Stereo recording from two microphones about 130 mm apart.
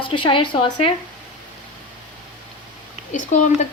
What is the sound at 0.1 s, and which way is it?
Speech, 40° left (ahead or behind).